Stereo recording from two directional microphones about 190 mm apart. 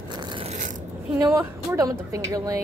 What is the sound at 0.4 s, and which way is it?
Biting, 35° right (ahead or behind).